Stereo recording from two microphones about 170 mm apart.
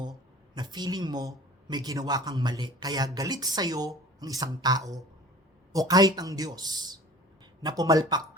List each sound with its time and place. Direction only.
0.5 s a man's voice: 25° right (ahead or behind)